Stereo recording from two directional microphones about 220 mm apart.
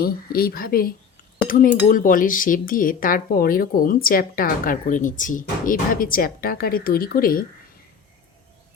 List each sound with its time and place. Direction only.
0.0 s speech: 45° left (ahead or behind)